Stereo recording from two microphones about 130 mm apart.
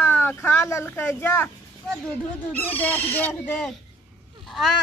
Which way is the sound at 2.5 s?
15° left (ahead or behind).